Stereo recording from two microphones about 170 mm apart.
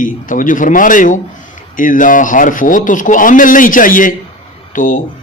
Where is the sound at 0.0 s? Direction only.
50° left (ahead or behind).